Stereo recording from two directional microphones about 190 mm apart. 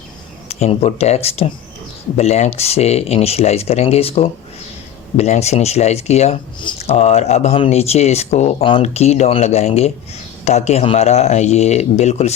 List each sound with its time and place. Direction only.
0.4 s speech: 30° left (ahead or behind)